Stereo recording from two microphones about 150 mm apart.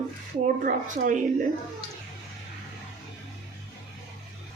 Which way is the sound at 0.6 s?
60° right (ahead or behind).